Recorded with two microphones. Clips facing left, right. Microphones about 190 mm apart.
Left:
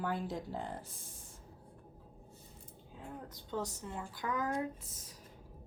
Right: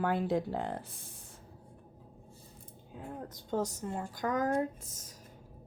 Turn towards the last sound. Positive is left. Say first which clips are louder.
# right 4 dB
turn(degrees=-45)  # may be behind; listen again after turning